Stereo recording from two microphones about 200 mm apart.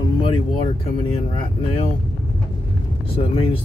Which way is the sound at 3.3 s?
30° left (ahead or behind).